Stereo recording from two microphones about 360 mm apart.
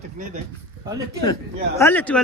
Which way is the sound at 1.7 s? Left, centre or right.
Centre.